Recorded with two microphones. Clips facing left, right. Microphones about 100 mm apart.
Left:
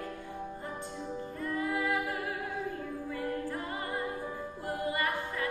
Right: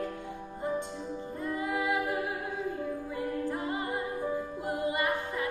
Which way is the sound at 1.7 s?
20° right (ahead or behind).